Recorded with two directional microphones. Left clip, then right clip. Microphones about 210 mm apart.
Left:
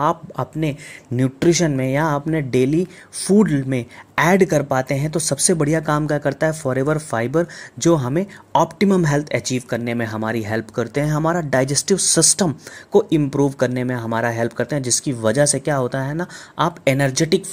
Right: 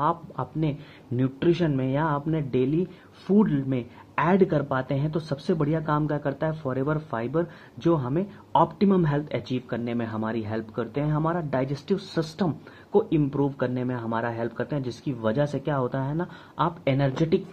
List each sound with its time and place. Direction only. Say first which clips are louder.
0.0 s speech: left 6 dB; 35° left (ahead or behind)